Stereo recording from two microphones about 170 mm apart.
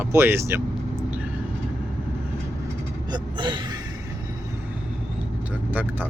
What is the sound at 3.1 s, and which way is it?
Speech, 25° right (ahead or behind).